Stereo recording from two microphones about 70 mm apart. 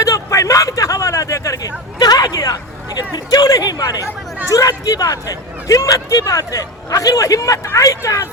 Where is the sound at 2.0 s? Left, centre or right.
Left.